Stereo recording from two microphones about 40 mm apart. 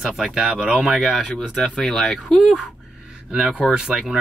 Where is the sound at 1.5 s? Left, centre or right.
Left.